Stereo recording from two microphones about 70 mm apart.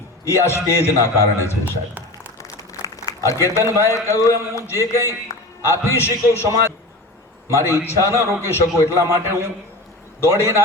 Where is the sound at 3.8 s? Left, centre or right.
Left.